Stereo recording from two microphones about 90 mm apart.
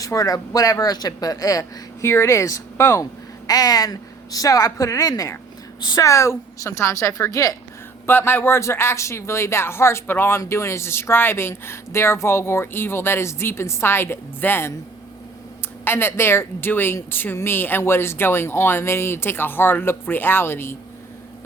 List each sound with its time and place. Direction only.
0.0 s speech: 40° left (ahead or behind)
8.0 s speech: 25° left (ahead or behind)
15.8 s speech: 25° left (ahead or behind)